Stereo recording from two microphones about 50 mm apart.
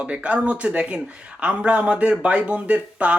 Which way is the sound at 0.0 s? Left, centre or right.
Right.